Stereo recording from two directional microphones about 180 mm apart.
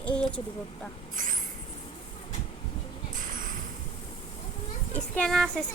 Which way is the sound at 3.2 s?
45° right (ahead or behind).